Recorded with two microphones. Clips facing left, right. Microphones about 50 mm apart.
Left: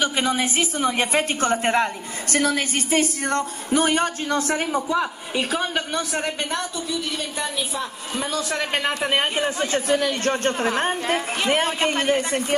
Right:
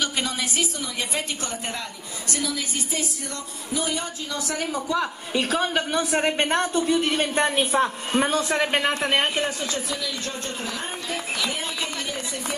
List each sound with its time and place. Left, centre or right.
0.0 s a woman's voice: left
4.7 s a woman's voice: left
5.0 s a woman's voice: centre
6.2 s a woman's voice: right
8.7 s a woman's voice: centre
9.3 s speech: left